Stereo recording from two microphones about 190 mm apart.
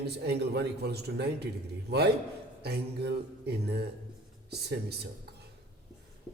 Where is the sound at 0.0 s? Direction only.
60° right (ahead or behind).